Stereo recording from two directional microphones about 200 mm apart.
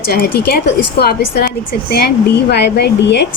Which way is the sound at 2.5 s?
55° left (ahead or behind).